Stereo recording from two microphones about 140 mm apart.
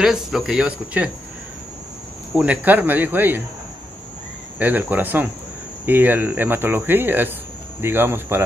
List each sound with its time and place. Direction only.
0.0 s speech: centre (ahead or behind)
2.3 s speech: 10° right (ahead or behind)
4.6 s speech: 10° right (ahead or behind)